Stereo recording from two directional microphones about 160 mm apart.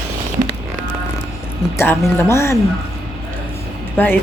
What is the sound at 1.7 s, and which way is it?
Speech, 15° left (ahead or behind).